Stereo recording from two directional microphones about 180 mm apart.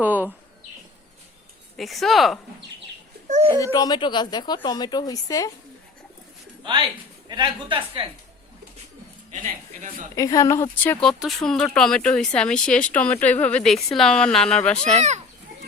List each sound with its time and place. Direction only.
0.0 s speech: 10° right (ahead or behind)
1.7 s speech: centre (ahead or behind)
3.2 s a child's voice: 40° right (ahead or behind)
3.6 s a woman's voice: 20° left (ahead or behind)
6.6 s a woman's voice: 25° right (ahead or behind)
9.3 s a man's voice: 45° right (ahead or behind)
10.2 s speech: 20° left (ahead or behind)
11.0 s speech: centre (ahead or behind)